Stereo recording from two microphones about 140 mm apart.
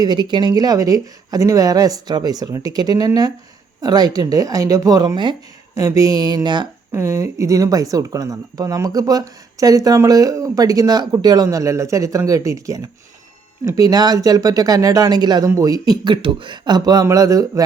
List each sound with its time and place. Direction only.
0.0 s speech: 30° right (ahead or behind)
6.9 s speech: 20° right (ahead or behind)